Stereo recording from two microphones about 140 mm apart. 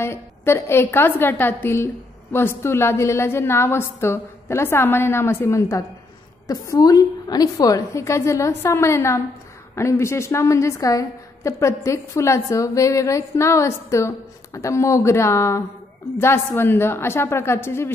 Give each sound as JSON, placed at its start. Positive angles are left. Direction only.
{"t": 0.0, "sound": "a woman's voice", "side_deg": 20}